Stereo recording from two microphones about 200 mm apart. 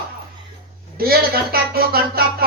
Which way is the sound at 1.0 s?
50° right (ahead or behind).